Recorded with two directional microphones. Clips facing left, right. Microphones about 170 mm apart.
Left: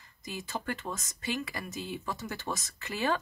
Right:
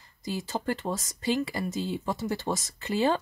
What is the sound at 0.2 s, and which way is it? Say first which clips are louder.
Speech: right 6 dB; 30° right (ahead or behind).